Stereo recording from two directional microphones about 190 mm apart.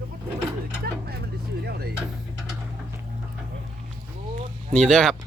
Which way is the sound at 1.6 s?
55° right (ahead or behind).